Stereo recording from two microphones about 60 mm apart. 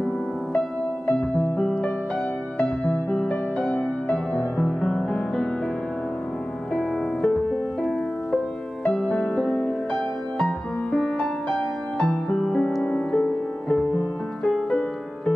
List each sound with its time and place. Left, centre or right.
1.0 s music: centre
4.6 s music: centre
6.7 s music: centre
8.8 s music: centre
11.1 s music: centre
12.4 s music: centre